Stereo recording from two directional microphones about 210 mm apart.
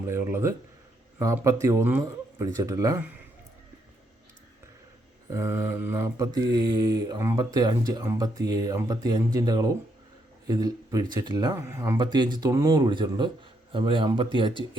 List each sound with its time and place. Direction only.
0.0 s mantra: 10° right (ahead or behind)
5.3 s mantra: 15° right (ahead or behind)
10.4 s speech: 20° right (ahead or behind)